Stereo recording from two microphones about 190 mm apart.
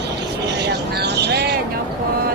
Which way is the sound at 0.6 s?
60° right (ahead or behind).